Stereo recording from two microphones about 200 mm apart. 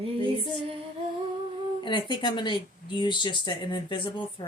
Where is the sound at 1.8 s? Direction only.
25° left (ahead or behind).